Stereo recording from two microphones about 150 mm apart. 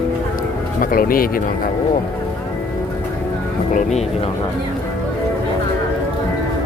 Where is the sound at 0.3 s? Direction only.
65° left (ahead or behind).